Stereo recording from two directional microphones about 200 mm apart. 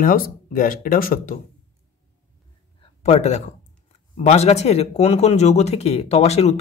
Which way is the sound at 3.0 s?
35° left (ahead or behind).